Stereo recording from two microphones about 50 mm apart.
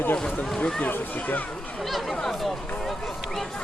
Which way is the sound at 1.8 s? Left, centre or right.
Centre.